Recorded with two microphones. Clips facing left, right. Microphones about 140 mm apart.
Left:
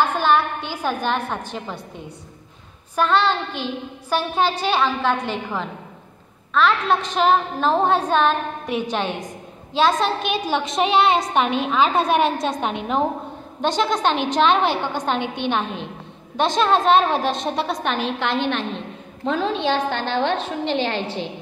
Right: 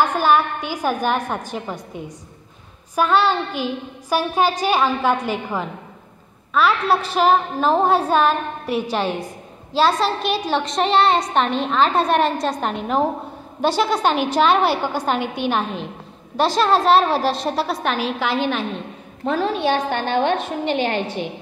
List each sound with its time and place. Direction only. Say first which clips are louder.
0.0 s a woman's voice: right 2 dB; 10° right (ahead or behind)
20.9 s a woman's voice: right 2 dB; 10° right (ahead or behind)